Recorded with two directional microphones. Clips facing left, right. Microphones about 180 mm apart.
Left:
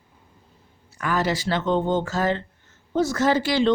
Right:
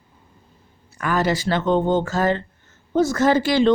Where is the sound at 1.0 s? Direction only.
50° right (ahead or behind).